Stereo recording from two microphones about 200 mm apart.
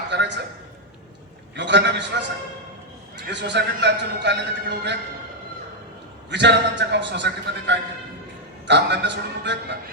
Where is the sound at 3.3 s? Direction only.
60° right (ahead or behind).